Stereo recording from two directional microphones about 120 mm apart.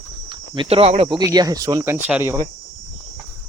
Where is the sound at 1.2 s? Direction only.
30° right (ahead or behind); by 2.3 s 15° right (ahead or behind).